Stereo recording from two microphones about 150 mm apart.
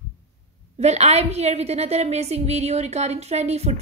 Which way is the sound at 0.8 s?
45° right (ahead or behind).